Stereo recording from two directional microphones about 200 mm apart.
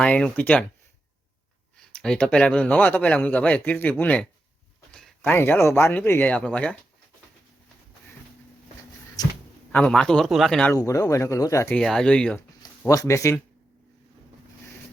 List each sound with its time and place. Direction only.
0.0 s a man's voice: 5° left (ahead or behind)
1.7 s a man's voice: 5° left (ahead or behind)
9.2 s speech: 20° left (ahead or behind)
9.7 s a man's voice: 5° left (ahead or behind)
10.8 s a man's voice: 15° left (ahead or behind)
11.8 s a man's voice: centre (ahead or behind)
12.8 s a man's voice: 15° left (ahead or behind)